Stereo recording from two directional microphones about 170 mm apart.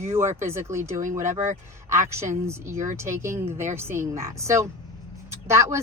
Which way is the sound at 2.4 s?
15° right (ahead or behind).